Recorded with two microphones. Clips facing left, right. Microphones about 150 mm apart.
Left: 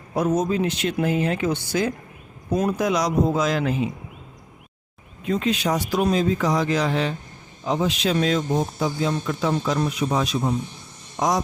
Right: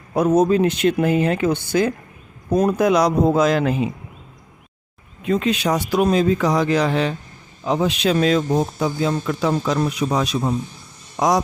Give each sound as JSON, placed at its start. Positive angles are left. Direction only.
{"t": 0.1, "sound": "speech", "side_deg": -60}
{"t": 5.2, "sound": "speech", "side_deg": -70}